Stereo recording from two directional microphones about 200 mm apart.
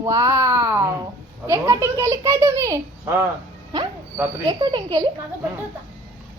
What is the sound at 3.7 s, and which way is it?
Train, 20° right (ahead or behind).